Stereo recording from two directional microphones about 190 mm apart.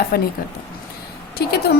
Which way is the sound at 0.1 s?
55° left (ahead or behind).